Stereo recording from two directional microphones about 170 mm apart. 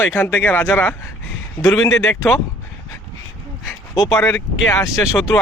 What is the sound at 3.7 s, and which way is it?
Dog, 20° left (ahead or behind).